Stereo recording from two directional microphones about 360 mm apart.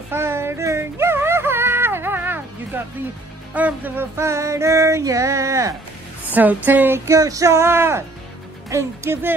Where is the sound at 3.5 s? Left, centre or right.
Centre.